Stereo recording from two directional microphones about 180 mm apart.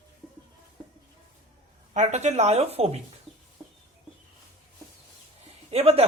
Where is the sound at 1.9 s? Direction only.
40° right (ahead or behind).